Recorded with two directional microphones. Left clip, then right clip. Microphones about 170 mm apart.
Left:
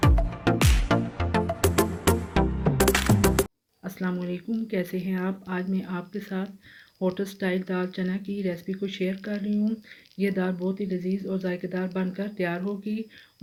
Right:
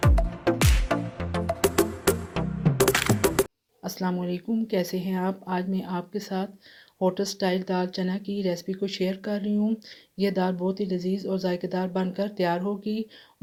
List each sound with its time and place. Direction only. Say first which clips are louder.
0.0 s music: even; centre (ahead or behind)
3.8 s speech: right 2 dB; 50° right (ahead or behind); by 13.1 s 65° right (ahead or behind)